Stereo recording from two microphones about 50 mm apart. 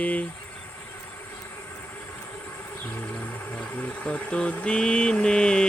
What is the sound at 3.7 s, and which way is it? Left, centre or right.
Speech, left.